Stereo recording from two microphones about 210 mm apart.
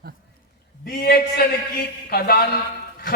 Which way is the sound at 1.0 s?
50° left (ahead or behind).